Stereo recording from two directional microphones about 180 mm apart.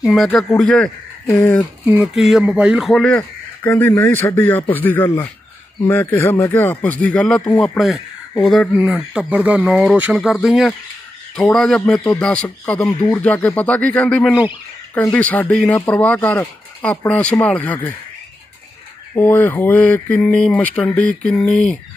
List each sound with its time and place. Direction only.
0.0 s speech: centre (ahead or behind)
1.9 s speech: centre (ahead or behind)
12.8 s speech: 20° left (ahead or behind)
13.2 s speech: 10° left (ahead or behind)
15.0 s speech: 10° left (ahead or behind)
19.1 s speech: 10° left (ahead or behind)